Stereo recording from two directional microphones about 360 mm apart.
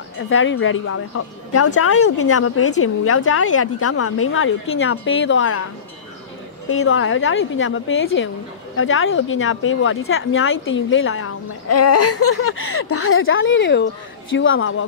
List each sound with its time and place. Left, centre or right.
0.3 s speech: left
6.7 s speech: left